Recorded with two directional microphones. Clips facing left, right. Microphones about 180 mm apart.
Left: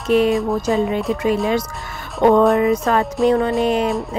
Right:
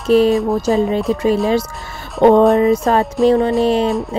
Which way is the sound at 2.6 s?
30° right (ahead or behind).